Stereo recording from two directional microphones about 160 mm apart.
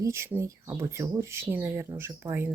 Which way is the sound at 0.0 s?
15° right (ahead or behind).